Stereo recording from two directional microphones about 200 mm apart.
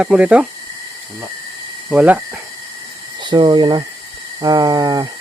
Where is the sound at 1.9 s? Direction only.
5° right (ahead or behind).